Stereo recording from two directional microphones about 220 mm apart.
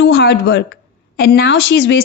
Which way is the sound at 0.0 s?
50° left (ahead or behind).